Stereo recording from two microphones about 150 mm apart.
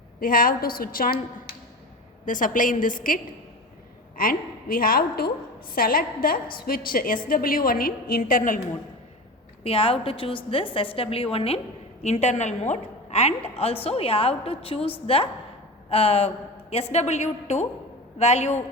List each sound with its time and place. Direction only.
0.2 s a woman's voice: 70° left (ahead or behind)
2.2 s a woman's voice: 60° left (ahead or behind)
4.2 s a woman's voice: 70° left (ahead or behind); by 5.3 s 90° left
5.7 s a woman's voice: 75° left (ahead or behind)
9.6 s a woman's voice: 40° left (ahead or behind)